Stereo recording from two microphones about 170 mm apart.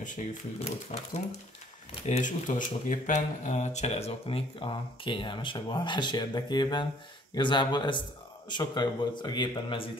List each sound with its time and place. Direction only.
0.0 s a man's voice: 45° left (ahead or behind); by 9.8 s 30° left (ahead or behind)